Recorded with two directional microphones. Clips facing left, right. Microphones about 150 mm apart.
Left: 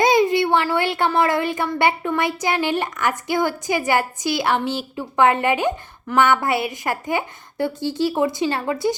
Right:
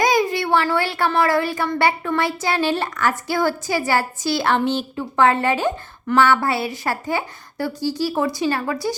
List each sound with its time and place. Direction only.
0.0 s a child's voice: 25° left (ahead or behind)